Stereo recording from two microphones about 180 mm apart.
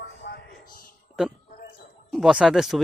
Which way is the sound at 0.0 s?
75° left (ahead or behind).